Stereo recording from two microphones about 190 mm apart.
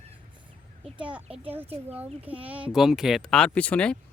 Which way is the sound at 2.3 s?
10° right (ahead or behind).